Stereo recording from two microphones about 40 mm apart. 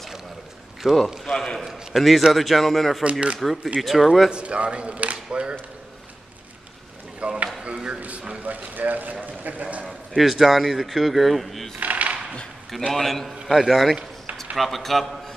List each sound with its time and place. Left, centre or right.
0.8 s a man's voice: centre
1.2 s a man's voice: centre
1.6 s a man's voice: centre
3.0 s speech: right
3.3 s speech: centre
4.3 s speech: right
7.2 s speech: right
7.6 s a sound: right
8.4 s speech: right
9.2 s a sound: right
10.1 s speech: centre
11.8 s a sound: right
12.9 s a man's voice: centre